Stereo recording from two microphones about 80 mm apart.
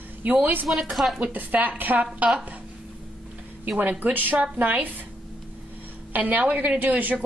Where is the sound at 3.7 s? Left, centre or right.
Right.